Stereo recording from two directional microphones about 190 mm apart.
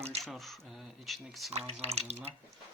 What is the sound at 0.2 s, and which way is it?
Speech, centre (ahead or behind).